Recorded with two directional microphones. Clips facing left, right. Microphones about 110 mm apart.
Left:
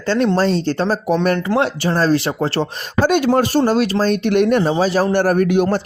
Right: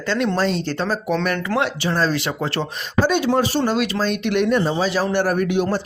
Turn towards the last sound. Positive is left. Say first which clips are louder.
# left 5 dB
turn(degrees=55)  # may be behind; listen again after turning